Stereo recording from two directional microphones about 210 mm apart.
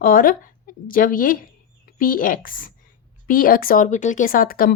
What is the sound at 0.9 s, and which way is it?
Speech, 40° left (ahead or behind).